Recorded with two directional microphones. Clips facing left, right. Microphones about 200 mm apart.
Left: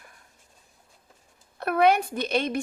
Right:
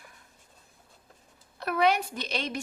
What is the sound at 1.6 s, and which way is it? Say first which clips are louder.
A woman's voice: left 4 dB; 55° left (ahead or behind).